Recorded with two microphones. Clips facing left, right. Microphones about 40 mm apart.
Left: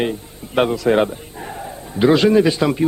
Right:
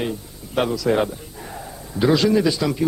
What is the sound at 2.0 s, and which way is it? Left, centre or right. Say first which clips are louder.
Speech: left 4 dB; left.